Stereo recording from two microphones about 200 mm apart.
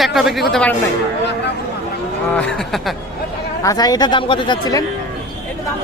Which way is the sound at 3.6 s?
20° left (ahead or behind).